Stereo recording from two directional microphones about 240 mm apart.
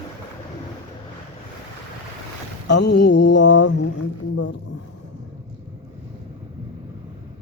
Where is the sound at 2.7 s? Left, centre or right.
Left.